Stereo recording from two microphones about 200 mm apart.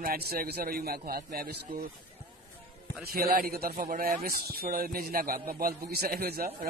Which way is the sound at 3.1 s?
50° right (ahead or behind).